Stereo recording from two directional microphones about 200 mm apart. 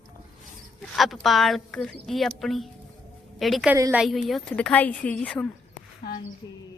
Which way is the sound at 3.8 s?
10° right (ahead or behind).